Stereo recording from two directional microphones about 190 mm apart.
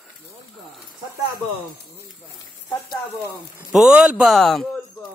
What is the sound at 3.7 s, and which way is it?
A man's voice, 5° right (ahead or behind).